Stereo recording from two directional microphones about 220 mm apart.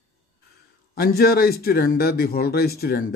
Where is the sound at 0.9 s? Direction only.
45° left (ahead or behind).